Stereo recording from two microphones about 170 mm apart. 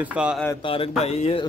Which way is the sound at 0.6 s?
35° left (ahead or behind).